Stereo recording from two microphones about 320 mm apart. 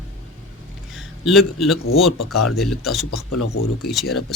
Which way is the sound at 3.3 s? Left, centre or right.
Left.